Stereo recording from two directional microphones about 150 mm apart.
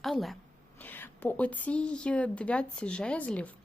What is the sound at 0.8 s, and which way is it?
A woman's voice, 10° left (ahead or behind).